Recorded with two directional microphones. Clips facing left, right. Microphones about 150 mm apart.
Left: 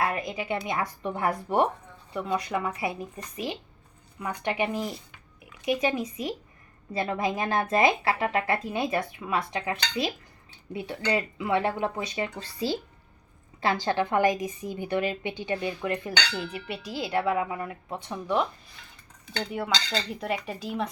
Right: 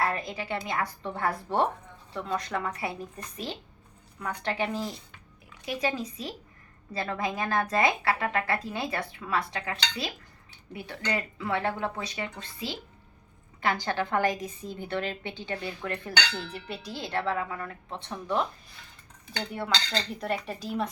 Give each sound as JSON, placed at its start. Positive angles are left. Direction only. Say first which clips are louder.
{"t": 0.0, "sound": "a woman's voice", "louder": "left 1 dB", "side_deg": 15}
{"t": 12.5, "sound": "speech", "louder": "left 8 dB", "side_deg": 40}
{"t": 13.8, "sound": "a woman's voice", "louder": "left 5 dB", "side_deg": 20}
{"t": 19.5, "sound": "cutlery", "louder": "left 1 dB", "side_deg": 5}